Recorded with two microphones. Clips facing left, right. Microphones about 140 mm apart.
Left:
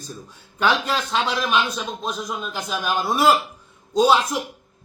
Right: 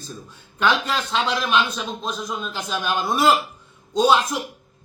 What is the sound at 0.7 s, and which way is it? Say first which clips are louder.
Speech: even; 35° left (ahead or behind).